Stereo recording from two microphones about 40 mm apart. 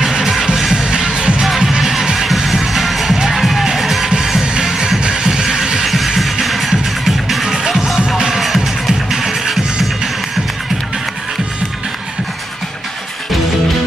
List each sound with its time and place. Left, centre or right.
0.0 s music: centre
0.7 s music: right; by 3.2 s centre
3.2 s music: centre
4.1 s music: right
5.9 s music: centre
7.4 s music: centre